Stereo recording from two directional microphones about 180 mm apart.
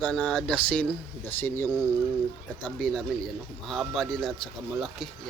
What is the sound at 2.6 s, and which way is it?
Speech, 5° left (ahead or behind).